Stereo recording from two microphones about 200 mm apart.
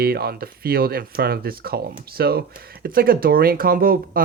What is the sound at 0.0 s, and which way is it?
Speech, 50° right (ahead or behind).